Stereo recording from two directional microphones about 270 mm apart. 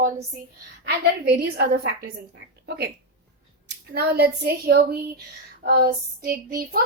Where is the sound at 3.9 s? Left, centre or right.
Right.